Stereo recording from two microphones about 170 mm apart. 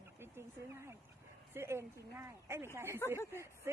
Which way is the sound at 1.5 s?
15° right (ahead or behind).